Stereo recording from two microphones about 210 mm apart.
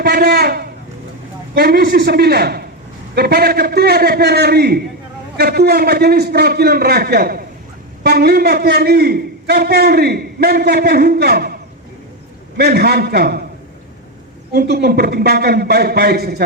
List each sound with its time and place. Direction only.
0.0 s a sound: 50° right (ahead or behind)
1.5 s a man's voice: 50° right (ahead or behind)
12.5 s a man's voice: 50° right (ahead or behind)
14.5 s a man's voice: 50° right (ahead or behind)